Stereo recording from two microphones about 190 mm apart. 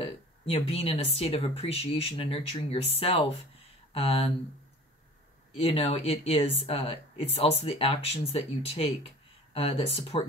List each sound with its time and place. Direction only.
0.0 s speech: 30° left (ahead or behind)
5.6 s speech: 30° left (ahead or behind)